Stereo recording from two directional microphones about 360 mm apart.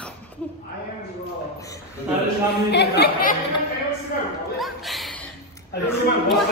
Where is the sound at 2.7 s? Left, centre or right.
Left.